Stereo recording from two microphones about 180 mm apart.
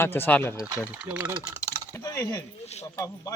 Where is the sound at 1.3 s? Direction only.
20° right (ahead or behind).